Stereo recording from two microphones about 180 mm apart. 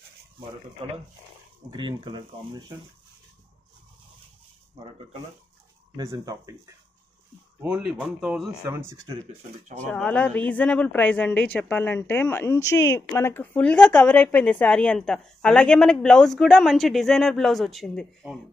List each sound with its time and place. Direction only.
0.8 s speech: 30° right (ahead or behind)
5.9 s speech: 20° right (ahead or behind)
7.6 s speech: 5° right (ahead or behind)
9.9 s a woman's voice: 5° left (ahead or behind)